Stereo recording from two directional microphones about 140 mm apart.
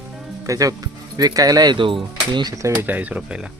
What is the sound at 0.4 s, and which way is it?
Speech, 25° right (ahead or behind).